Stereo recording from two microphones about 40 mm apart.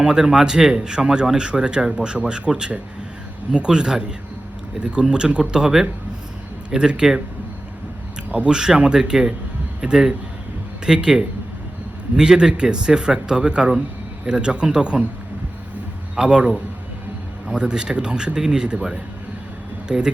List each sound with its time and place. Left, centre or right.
0.0 s speech: centre
8.3 s speech: right
8.5 s speech: centre
16.1 s speech: right
17.5 s speech: right
19.9 s speech: right